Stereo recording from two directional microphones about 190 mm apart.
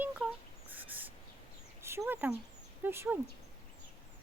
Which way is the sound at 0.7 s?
10° right (ahead or behind).